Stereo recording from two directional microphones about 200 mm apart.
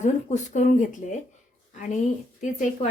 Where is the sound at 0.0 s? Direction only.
40° left (ahead or behind).